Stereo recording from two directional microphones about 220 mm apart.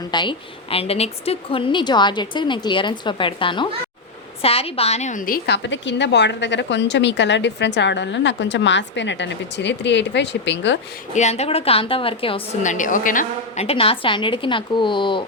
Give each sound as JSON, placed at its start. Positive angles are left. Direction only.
{"t": 0.1, "sound": "a woman's voice", "side_deg": 20}
{"t": 11.1, "sound": "a woman's voice", "side_deg": 30}